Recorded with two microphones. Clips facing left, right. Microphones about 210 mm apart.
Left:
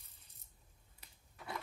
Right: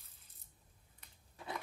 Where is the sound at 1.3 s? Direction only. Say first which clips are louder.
Right 1 dB; 20° right (ahead or behind).